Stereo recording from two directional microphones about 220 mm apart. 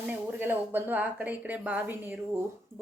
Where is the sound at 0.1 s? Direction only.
10° right (ahead or behind).